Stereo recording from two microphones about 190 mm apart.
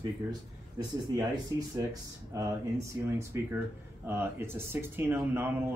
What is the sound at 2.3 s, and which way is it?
Speech, 15° right (ahead or behind).